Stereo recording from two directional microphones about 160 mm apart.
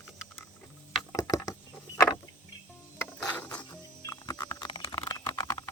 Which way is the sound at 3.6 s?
25° left (ahead or behind).